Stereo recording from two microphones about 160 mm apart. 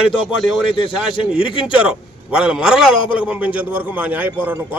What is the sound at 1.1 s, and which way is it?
Speech, 35° left (ahead or behind).